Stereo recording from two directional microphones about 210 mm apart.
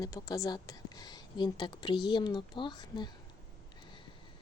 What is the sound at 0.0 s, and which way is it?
A woman's voice, 15° left (ahead or behind).